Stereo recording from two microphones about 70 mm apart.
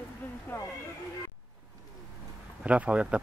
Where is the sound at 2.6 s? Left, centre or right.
Centre.